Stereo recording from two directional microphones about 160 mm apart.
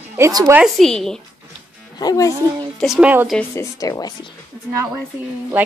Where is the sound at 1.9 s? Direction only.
25° left (ahead or behind).